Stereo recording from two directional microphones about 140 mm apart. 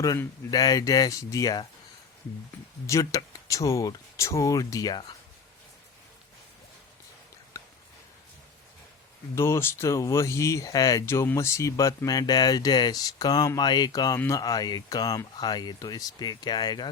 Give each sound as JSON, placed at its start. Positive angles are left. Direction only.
{"t": 0.5, "sound": "speech", "side_deg": 25}
{"t": 2.8, "sound": "speech", "side_deg": 25}
{"t": 9.3, "sound": "speech", "side_deg": 20}